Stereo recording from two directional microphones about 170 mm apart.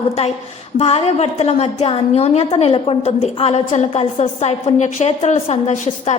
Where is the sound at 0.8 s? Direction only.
35° left (ahead or behind).